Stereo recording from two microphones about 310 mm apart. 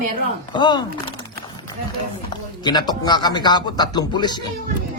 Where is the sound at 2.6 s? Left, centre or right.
Centre.